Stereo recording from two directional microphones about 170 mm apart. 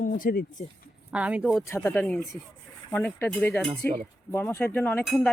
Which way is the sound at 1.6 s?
15° left (ahead or behind).